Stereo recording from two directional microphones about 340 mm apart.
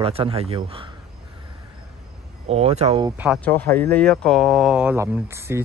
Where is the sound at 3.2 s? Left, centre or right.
Centre.